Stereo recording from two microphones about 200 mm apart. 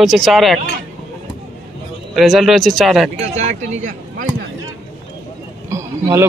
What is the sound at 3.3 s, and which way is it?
Speech, 35° right (ahead or behind).